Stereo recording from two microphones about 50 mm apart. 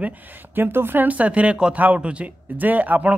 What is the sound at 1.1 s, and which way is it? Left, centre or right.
Speech, right.